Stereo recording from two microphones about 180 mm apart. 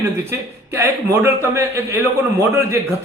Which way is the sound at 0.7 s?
15° right (ahead or behind).